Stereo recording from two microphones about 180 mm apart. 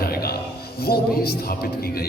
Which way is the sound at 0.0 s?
60° left (ahead or behind).